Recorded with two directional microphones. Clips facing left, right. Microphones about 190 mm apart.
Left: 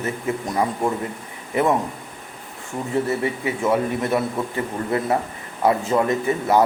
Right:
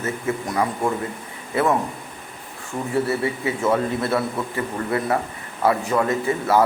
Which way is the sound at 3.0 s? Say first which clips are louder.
Even; 20° left (ahead or behind).